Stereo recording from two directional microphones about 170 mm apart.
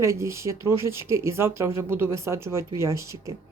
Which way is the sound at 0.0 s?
15° right (ahead or behind).